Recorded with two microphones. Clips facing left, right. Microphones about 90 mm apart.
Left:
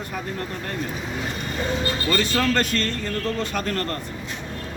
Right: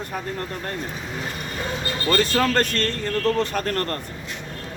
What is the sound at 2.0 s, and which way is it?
Speech, 40° right (ahead or behind).